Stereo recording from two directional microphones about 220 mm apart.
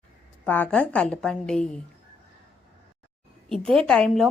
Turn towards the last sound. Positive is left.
turn(degrees=5)  # may be behind; listen again after turning